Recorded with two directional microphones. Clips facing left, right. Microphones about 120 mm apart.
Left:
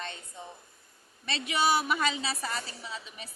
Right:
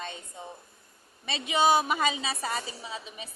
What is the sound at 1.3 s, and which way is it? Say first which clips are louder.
A woman's voice: right 3 dB; 20° right (ahead or behind).